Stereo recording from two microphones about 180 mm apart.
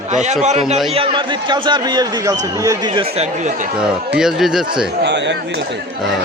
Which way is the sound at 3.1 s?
40° right (ahead or behind).